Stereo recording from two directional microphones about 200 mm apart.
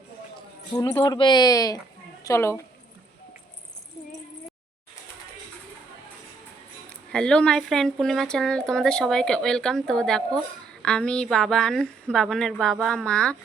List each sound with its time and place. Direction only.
0.3 s a woman's voice: 20° left (ahead or behind)
7.1 s speech: 5° left (ahead or behind)